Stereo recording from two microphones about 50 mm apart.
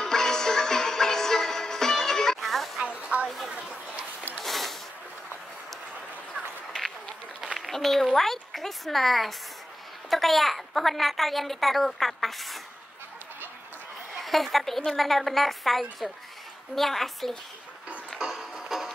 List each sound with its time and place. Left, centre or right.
0.0 s music: centre
2.8 s music: right
4.4 s a sound: centre
6.7 s a sound: centre
10.0 s a woman's voice: centre
14.1 s a woman's voice: centre
18.2 s music: centre